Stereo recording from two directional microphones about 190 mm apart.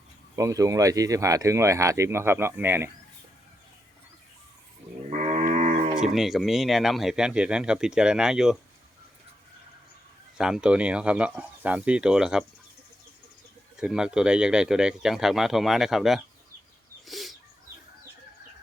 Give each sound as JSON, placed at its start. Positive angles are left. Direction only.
{"t": 0.3, "sound": "speech", "side_deg": -15}
{"t": 5.0, "sound": "cattle", "side_deg": -35}
{"t": 6.0, "sound": "speech", "side_deg": 0}
{"t": 10.3, "sound": "speech", "side_deg": -5}
{"t": 13.7, "sound": "speech", "side_deg": -5}
{"t": 17.1, "sound": "a sound", "side_deg": 0}